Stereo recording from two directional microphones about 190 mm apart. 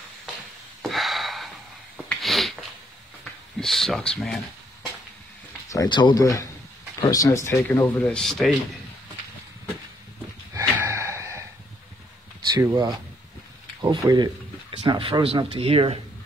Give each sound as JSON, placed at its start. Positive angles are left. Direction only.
{"t": 0.8, "sound": "gasp", "side_deg": 0}
{"t": 2.0, "sound": "a sound", "side_deg": 0}
{"t": 3.5, "sound": "speech", "side_deg": 0}
{"t": 5.7, "sound": "speech", "side_deg": 20}
{"t": 10.5, "sound": "wheeze", "side_deg": -15}
{"t": 12.5, "sound": "speech", "side_deg": -20}